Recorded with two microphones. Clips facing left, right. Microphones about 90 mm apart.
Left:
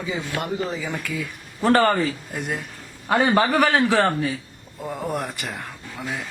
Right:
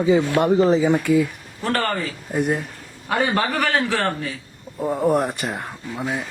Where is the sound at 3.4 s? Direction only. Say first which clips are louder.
Left 3 dB; 15° left (ahead or behind).